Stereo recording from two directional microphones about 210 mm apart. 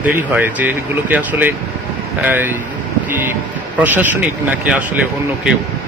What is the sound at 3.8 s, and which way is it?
Speech, 10° right (ahead or behind).